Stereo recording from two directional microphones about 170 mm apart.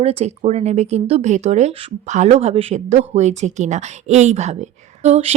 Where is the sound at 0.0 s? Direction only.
35° right (ahead or behind).